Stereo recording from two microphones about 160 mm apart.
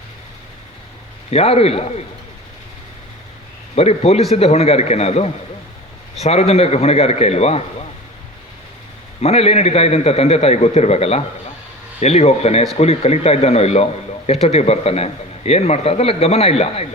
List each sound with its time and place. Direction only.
1.3 s speech: 40° left (ahead or behind)
3.8 s speech: 40° left (ahead or behind)
9.2 s speech: 40° left (ahead or behind)